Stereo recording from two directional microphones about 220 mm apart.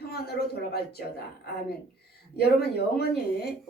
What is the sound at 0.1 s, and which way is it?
A woman's voice, 45° left (ahead or behind).